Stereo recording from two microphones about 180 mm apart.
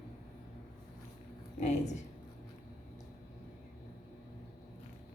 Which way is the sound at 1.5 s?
40° left (ahead or behind).